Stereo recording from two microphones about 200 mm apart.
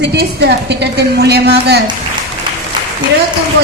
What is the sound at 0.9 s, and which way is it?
Speech, 55° right (ahead or behind).